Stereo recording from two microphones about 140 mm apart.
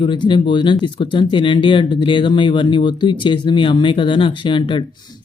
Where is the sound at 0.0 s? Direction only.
35° left (ahead or behind).